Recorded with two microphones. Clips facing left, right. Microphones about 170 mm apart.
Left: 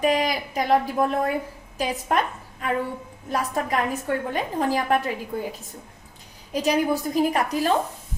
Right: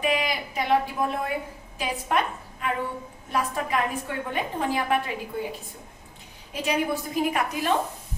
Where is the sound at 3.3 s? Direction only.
40° left (ahead or behind).